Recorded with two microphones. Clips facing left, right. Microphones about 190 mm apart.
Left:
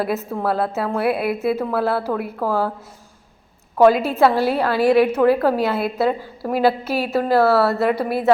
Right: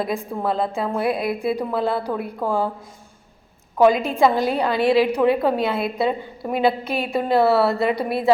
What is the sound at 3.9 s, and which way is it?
A woman's voice, 5° left (ahead or behind).